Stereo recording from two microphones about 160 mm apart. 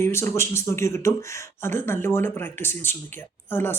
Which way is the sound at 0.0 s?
15° left (ahead or behind).